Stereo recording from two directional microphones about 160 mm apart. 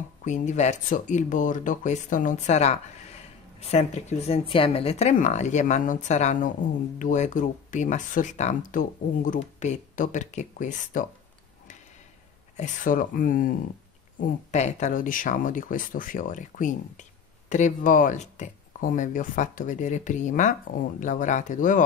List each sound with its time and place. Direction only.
0.2 s speech: 50° left (ahead or behind)
12.5 s speech: 55° left (ahead or behind)
14.2 s speech: 45° left (ahead or behind)